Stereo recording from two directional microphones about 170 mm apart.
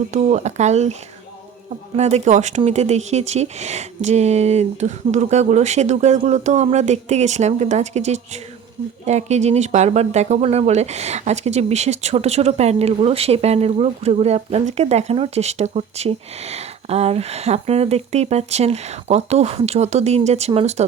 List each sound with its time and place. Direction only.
0.1 s speech: 40° right (ahead or behind)
2.0 s speech: 40° right (ahead or behind)